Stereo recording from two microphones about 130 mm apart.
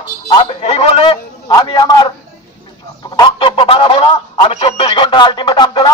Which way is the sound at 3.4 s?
40° left (ahead or behind).